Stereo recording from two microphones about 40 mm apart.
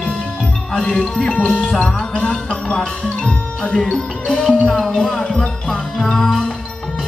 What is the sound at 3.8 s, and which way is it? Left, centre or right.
Speech, centre.